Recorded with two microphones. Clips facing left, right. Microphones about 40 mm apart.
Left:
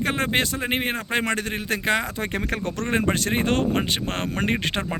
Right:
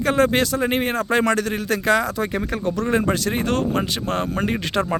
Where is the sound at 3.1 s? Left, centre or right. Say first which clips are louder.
Right 1 dB; left.